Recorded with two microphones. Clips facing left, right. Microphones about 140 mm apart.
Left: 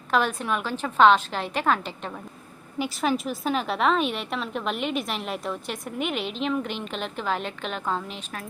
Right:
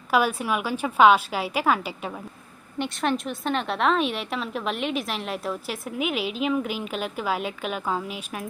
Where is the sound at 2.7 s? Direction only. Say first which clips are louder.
Even; 5° left (ahead or behind).